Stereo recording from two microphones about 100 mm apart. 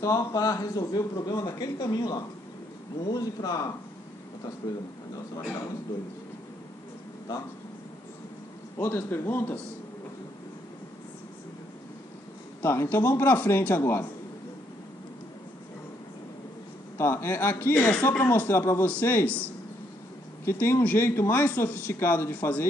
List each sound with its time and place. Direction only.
0.0 s a man's voice: 35° left (ahead or behind)
8.7 s speech: 20° left (ahead or behind)
12.6 s speech: 25° left (ahead or behind)
16.9 s speech: 25° left (ahead or behind)